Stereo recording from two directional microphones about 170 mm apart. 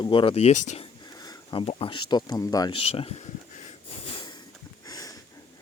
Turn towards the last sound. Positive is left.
turn(degrees=20)  # may be behind; listen again after turning